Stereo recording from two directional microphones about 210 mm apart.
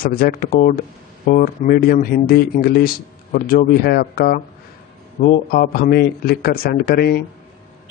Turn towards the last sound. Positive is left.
turn(degrees=45)  # may be behind; listen again after turning